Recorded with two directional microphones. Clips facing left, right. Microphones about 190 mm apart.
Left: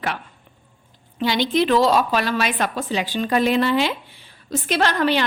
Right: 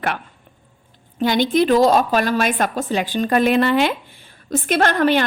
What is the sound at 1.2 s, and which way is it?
A woman's voice, 50° right (ahead or behind).